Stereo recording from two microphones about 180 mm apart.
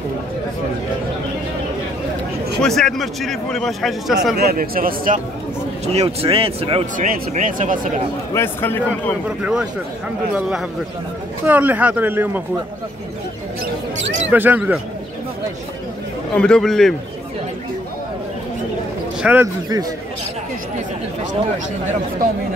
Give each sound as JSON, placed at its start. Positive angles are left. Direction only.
{"t": 2.6, "sound": "a man's voice", "side_deg": 0}
{"t": 4.4, "sound": "speech", "side_deg": -55}
{"t": 5.9, "sound": "speech", "side_deg": -30}
{"t": 7.0, "sound": "speech", "side_deg": -50}
{"t": 8.3, "sound": "a man's voice", "side_deg": 15}
{"t": 9.4, "sound": "a man's voice", "side_deg": -5}
{"t": 11.4, "sound": "speech", "side_deg": -10}
{"t": 14.3, "sound": "speech", "side_deg": -10}
{"t": 16.3, "sound": "a man's voice", "side_deg": 5}
{"t": 19.2, "sound": "speech", "side_deg": -15}